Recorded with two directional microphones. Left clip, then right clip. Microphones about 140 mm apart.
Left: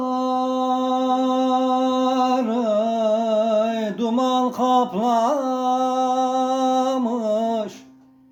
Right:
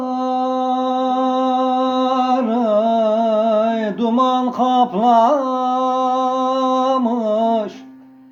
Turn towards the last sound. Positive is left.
turn(degrees=20)  # may be behind; listen again after turning